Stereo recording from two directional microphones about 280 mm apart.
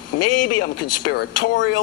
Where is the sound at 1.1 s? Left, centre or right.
Left.